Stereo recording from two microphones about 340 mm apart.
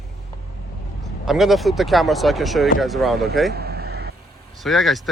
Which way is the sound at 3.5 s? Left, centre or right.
Right.